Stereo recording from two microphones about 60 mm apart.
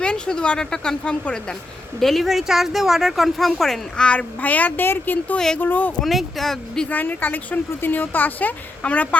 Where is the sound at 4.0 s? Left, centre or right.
Left.